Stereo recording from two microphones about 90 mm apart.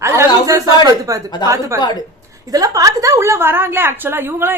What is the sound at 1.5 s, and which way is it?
Speech, 35° right (ahead or behind).